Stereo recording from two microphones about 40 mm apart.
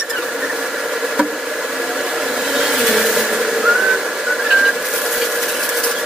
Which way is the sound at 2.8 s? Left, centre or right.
Centre.